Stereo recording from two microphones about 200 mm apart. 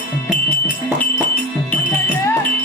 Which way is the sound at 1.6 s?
5° left (ahead or behind).